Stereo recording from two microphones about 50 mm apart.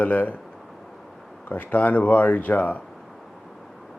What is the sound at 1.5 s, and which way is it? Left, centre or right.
Speech, left.